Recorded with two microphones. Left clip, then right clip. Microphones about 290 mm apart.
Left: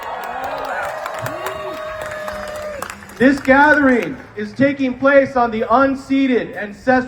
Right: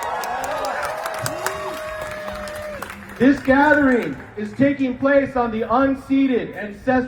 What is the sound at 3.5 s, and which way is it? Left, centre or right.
Speech, left.